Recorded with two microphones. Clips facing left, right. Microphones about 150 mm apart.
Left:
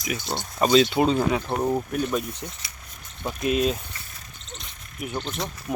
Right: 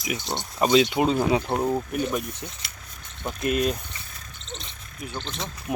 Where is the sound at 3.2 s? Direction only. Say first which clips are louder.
Left 1 dB; centre (ahead or behind).